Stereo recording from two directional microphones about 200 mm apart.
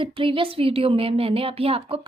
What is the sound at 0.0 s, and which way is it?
A woman's voice, 25° right (ahead or behind).